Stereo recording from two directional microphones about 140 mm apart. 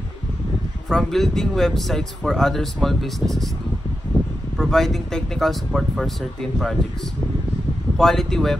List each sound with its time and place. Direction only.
0.8 s speech: centre (ahead or behind)
4.6 s speech: centre (ahead or behind)
8.0 s speech: 5° left (ahead or behind)